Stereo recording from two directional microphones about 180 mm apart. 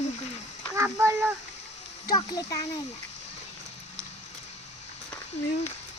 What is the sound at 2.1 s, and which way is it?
Speech, 20° left (ahead or behind).